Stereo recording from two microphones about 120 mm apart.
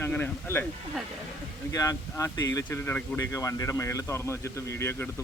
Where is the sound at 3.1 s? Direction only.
30° left (ahead or behind).